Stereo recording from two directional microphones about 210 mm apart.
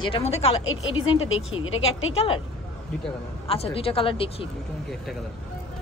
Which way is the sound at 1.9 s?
25° left (ahead or behind).